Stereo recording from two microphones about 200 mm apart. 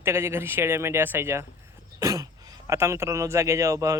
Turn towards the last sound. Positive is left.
turn(degrees=-15)  # may be behind; listen again after turning